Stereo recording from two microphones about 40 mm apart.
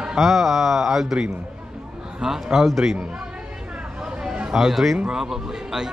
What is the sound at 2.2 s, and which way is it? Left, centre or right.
Speech, centre.